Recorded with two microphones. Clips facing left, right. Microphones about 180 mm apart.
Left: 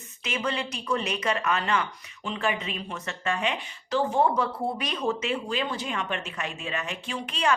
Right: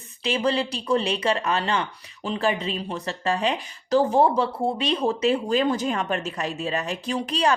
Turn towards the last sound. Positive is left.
turn(degrees=-35)  # may be behind; listen again after turning